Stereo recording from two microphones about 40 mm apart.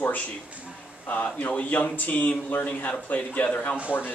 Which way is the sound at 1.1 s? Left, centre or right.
Left.